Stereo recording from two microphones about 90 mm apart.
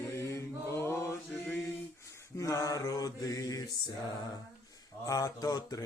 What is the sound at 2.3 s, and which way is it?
Mantra, 35° left (ahead or behind).